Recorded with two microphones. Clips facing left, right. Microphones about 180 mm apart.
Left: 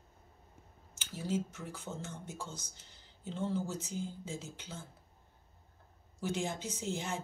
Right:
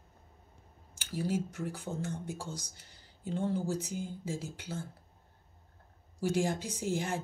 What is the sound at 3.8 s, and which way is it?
Speech, 60° right (ahead or behind).